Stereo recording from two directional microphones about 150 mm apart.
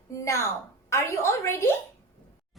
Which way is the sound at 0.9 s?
15° left (ahead or behind).